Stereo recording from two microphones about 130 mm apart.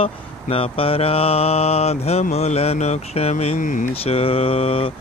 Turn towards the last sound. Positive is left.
turn(degrees=45)  # may be behind; listen again after turning